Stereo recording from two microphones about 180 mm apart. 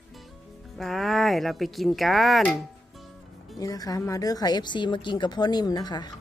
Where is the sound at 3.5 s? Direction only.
20° left (ahead or behind).